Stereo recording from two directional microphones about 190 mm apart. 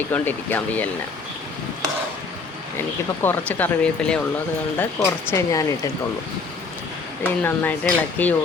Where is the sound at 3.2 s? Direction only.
10° left (ahead or behind).